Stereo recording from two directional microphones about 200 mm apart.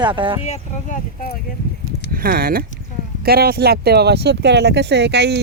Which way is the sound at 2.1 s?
45° right (ahead or behind).